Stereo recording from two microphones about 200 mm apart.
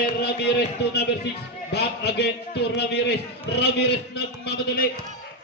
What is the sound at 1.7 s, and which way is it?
A man's voice, 55° left (ahead or behind).